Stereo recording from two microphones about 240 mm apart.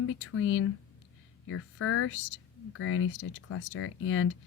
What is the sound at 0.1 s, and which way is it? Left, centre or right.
Speech, left.